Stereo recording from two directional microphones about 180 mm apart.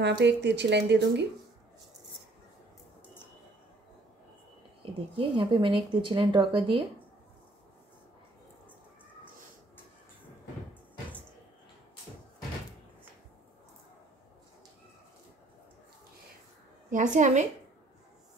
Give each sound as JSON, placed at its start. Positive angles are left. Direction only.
{"t": 0.0, "sound": "speech", "side_deg": -70}
{"t": 4.9, "sound": "speech", "side_deg": -30}
{"t": 16.9, "sound": "a woman's voice", "side_deg": -45}